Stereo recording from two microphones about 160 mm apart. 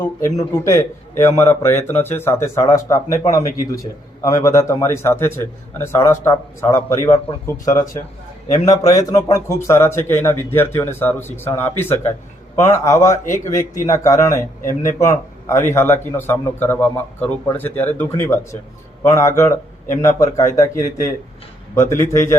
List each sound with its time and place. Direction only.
0.0 s speech: 20° left (ahead or behind)